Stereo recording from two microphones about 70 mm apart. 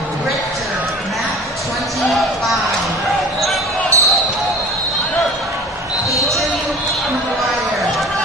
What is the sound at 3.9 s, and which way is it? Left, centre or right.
Basketball bounce, right.